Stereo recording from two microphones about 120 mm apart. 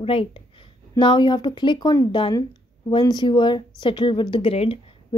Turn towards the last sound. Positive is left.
turn(degrees=55)  # may be behind; listen again after turning